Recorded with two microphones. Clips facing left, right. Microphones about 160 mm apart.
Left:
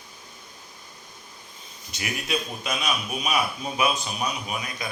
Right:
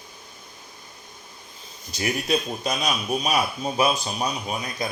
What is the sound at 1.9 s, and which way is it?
A man's voice, 35° right (ahead or behind).